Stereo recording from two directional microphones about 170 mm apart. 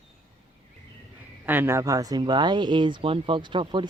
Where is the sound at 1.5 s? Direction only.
15° right (ahead or behind).